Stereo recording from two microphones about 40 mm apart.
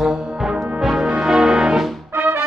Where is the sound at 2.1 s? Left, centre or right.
Right.